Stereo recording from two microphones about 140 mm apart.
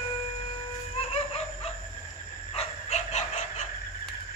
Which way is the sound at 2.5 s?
55° left (ahead or behind).